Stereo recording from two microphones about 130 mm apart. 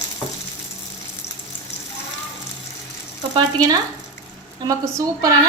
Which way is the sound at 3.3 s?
35° right (ahead or behind).